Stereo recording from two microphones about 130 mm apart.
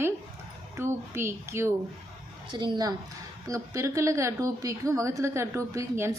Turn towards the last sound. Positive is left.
turn(degrees=-20)  # may be behind; listen again after turning